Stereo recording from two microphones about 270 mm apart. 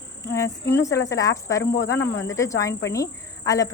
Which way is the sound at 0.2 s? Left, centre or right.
Centre.